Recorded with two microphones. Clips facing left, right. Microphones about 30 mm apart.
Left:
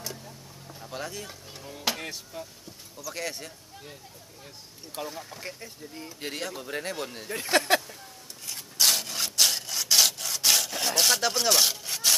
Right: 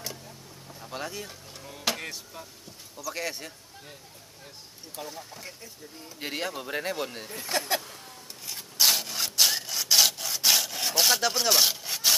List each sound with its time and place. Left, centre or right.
0.7 s speech: centre
5.0 s speech: centre
5.4 s speech: left
6.1 s speech: centre
7.5 s speech: left
8.5 s sawing: centre